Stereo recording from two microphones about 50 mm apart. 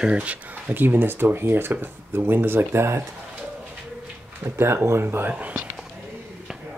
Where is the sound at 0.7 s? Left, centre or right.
Right.